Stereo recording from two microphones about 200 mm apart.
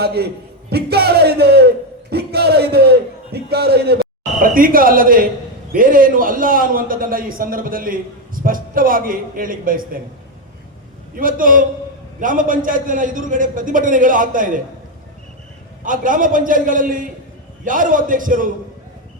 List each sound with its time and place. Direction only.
0.0 s a man's voice: 55° right (ahead or behind)
0.7 s a sound: 55° right (ahead or behind)
4.4 s a man's voice: 45° right (ahead or behind)
11.1 s a man's voice: 45° right (ahead or behind)
15.8 s a man's voice: 40° right (ahead or behind)